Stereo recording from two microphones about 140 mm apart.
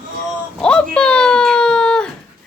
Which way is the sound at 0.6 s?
5° left (ahead or behind).